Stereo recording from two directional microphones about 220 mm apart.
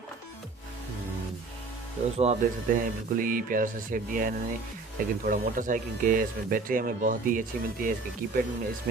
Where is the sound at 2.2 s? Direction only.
35° right (ahead or behind).